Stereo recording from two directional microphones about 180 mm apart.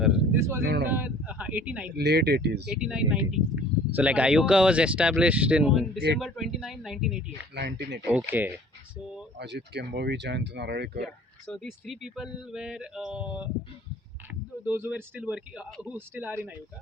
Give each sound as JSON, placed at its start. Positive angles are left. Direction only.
{"t": 0.3, "sound": "a sound", "side_deg": -15}
{"t": 0.6, "sound": "speech", "side_deg": -60}
{"t": 0.9, "sound": "speech", "side_deg": -10}
{"t": 2.0, "sound": "speech", "side_deg": -65}
{"t": 2.7, "sound": "speech", "side_deg": -5}
{"t": 7.5, "sound": "speech", "side_deg": -65}
{"t": 8.0, "sound": "speech", "side_deg": -10}
{"t": 9.4, "sound": "speech", "side_deg": -70}
{"t": 11.4, "sound": "speech", "side_deg": 0}
{"t": 14.6, "sound": "speech", "side_deg": -10}